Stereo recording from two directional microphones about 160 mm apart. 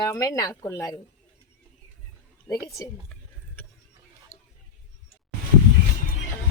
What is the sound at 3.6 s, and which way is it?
Vehicle, 10° left (ahead or behind).